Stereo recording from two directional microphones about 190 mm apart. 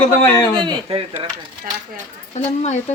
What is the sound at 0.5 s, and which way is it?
Speech, 25° right (ahead or behind).